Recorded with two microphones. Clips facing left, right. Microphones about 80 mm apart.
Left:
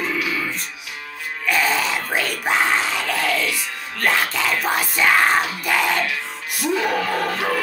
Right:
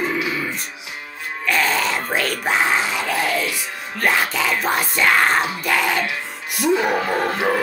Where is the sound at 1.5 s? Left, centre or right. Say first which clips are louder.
Even; centre.